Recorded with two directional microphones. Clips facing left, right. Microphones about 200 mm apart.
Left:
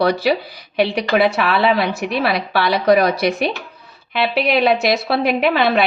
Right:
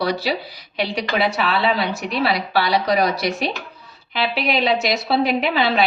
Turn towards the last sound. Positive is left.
turn(degrees=55)  # may be behind; listen again after turning